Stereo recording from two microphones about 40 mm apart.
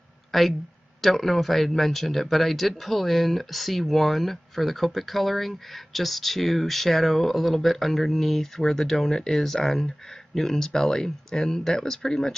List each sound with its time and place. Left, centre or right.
0.3 s speech: centre